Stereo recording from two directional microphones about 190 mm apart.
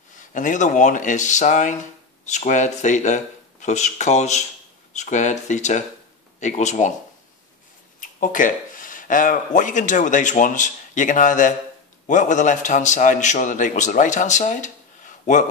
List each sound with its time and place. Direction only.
0.1 s a man's voice: 40° left (ahead or behind)
8.0 s a man's voice: 45° left (ahead or behind)